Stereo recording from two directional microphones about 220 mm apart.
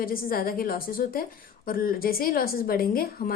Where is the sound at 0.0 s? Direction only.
40° left (ahead or behind).